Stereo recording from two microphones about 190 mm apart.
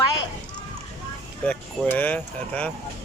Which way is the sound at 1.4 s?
10° left (ahead or behind).